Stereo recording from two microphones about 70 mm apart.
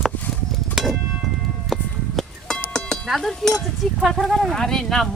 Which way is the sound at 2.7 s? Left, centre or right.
Centre.